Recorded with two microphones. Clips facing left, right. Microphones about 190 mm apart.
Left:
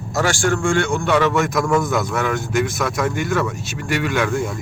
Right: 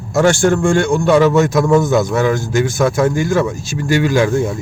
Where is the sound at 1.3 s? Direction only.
25° right (ahead or behind).